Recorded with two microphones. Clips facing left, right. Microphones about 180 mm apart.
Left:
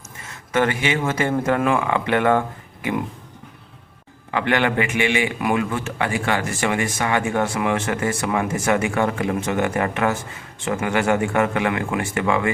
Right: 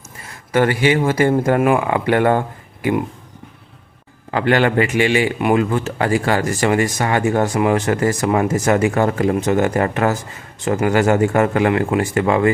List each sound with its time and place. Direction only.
0.5 s a man's voice: 35° right (ahead or behind)
4.3 s a man's voice: 35° right (ahead or behind)